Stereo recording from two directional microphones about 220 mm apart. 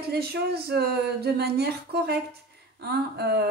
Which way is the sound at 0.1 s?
45° right (ahead or behind).